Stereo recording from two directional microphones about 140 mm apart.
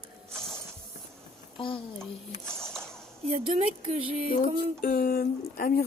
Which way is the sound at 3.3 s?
50° right (ahead or behind).